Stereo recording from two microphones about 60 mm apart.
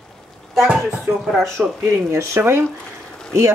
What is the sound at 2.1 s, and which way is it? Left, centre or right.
Speech, right.